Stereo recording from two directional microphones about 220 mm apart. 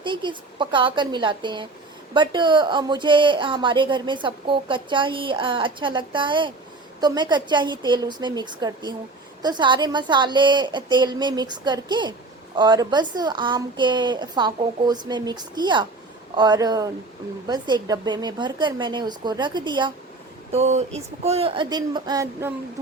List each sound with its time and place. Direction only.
0.0 s speech: 20° right (ahead or behind)